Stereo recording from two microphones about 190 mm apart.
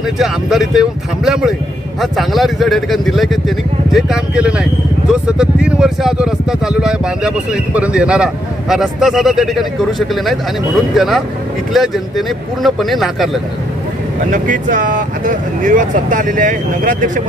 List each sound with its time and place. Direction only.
0.2 s speech: centre (ahead or behind)
14.3 s speech: 45° right (ahead or behind)